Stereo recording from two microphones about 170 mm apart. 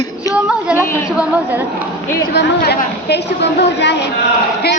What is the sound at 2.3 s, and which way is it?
A woman's voice, 75° left (ahead or behind).